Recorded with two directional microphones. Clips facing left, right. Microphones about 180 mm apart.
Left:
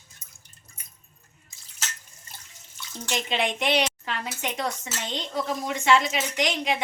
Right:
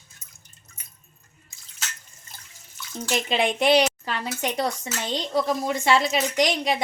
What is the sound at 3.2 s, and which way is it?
A woman's voice, 35° right (ahead or behind).